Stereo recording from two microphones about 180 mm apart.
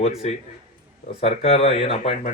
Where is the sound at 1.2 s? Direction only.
35° left (ahead or behind).